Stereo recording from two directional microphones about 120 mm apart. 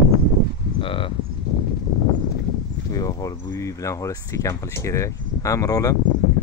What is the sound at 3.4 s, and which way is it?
Speech, 20° left (ahead or behind).